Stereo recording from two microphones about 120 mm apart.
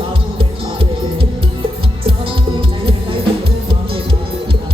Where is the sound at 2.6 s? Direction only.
45° right (ahead or behind).